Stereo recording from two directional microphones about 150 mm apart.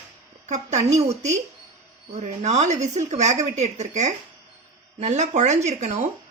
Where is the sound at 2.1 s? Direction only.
50° right (ahead or behind).